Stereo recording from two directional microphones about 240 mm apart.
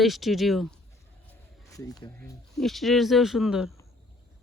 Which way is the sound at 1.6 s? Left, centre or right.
Centre.